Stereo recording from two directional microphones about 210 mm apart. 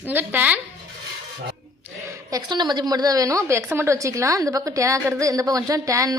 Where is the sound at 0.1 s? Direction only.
10° right (ahead or behind).